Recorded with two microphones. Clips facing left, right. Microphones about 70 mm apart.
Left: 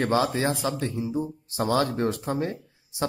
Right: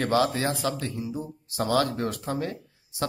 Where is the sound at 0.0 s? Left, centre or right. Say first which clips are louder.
Even; left.